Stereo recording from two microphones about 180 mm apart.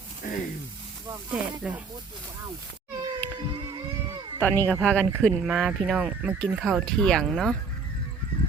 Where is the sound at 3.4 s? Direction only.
25° right (ahead or behind).